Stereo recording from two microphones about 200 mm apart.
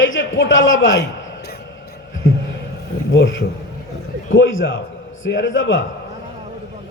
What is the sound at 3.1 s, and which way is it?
A man's voice, 70° left (ahead or behind).